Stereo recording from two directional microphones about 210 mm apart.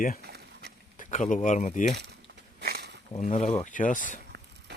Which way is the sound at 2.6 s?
50° right (ahead or behind).